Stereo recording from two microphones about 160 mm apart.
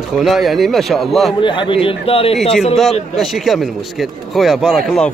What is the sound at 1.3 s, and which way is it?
A man's voice, 30° left (ahead or behind).